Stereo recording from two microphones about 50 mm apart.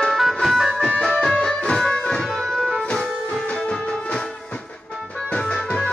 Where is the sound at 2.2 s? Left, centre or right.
Centre.